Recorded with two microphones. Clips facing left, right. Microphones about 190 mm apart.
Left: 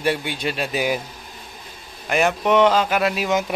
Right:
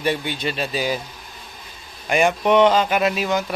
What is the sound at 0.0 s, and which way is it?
Speech, 10° left (ahead or behind).